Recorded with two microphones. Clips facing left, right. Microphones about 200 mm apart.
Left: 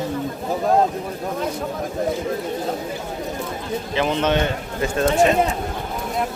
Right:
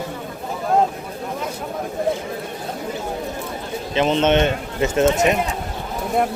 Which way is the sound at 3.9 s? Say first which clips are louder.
Right 4 dB; 20° right (ahead or behind).